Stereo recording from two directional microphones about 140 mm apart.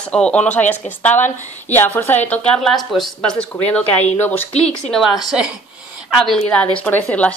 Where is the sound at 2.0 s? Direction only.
15° left (ahead or behind).